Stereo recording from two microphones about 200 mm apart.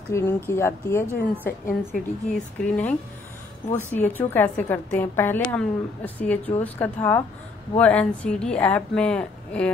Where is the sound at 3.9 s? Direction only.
10° left (ahead or behind).